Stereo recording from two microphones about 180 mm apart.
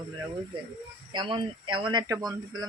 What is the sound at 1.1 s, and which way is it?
Speech, 25° right (ahead or behind).